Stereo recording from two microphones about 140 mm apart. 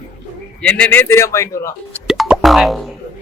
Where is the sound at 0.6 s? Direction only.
10° left (ahead or behind).